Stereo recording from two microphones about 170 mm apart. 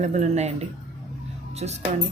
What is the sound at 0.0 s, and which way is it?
Speech, 45° right (ahead or behind).